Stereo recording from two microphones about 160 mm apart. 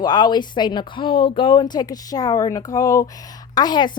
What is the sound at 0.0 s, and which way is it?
A woman's voice, 25° left (ahead or behind).